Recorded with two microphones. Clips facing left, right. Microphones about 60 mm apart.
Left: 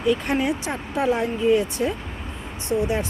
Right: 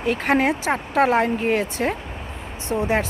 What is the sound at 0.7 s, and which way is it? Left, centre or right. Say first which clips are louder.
Speech: right 4 dB; right.